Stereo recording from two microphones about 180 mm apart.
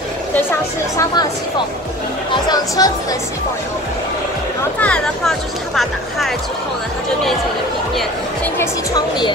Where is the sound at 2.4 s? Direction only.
20° left (ahead or behind).